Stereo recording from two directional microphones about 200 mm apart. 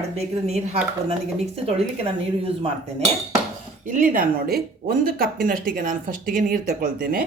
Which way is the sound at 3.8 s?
40° right (ahead or behind).